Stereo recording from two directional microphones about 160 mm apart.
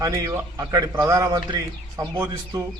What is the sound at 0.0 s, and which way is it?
A man's voice, 20° right (ahead or behind).